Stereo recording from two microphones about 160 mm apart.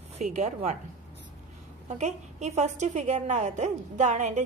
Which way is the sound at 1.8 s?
45° right (ahead or behind).